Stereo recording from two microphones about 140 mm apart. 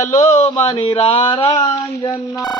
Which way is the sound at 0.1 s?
60° left (ahead or behind).